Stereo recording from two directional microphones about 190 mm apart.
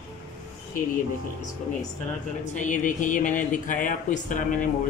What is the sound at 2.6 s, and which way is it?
Speech, 40° left (ahead or behind).